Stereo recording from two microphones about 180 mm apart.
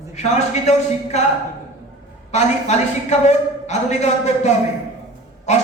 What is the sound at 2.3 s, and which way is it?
A woman's voice, 40° left (ahead or behind).